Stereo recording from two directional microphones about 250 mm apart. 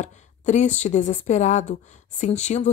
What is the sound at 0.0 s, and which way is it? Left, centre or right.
A woman's voice, left.